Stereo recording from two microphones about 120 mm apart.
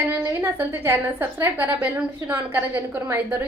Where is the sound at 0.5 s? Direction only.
15° right (ahead or behind).